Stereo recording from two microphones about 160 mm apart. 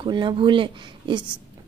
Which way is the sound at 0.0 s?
30° right (ahead or behind).